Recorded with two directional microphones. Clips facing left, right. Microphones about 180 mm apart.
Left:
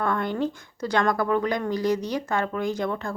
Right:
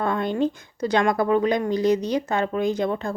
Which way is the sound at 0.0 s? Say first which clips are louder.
Right 3 dB; 20° right (ahead or behind).